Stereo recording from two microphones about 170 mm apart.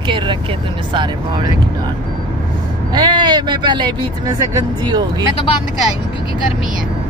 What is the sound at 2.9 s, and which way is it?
Speech, 25° right (ahead or behind).